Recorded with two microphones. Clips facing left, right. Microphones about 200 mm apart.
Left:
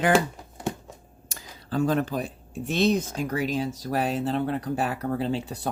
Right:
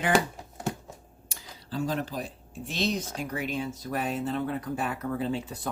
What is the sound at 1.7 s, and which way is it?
Speech, 55° left (ahead or behind).